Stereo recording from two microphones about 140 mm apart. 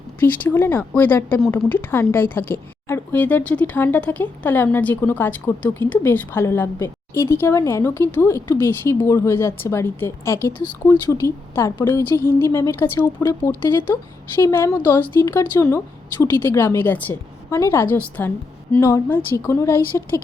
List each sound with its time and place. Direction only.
0.2 s speech: 15° left (ahead or behind)
14.3 s speech: 20° left (ahead or behind)